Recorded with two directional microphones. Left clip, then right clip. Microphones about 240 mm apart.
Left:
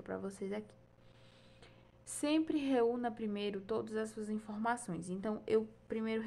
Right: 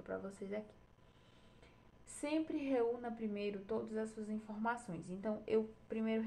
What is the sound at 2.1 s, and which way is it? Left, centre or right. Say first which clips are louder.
A woman's voice: left 5 dB; left.